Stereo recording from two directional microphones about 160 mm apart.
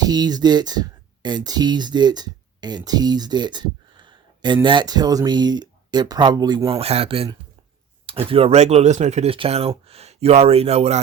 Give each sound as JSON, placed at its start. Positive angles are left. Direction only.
{"t": 0.0, "sound": "speech", "side_deg": -25}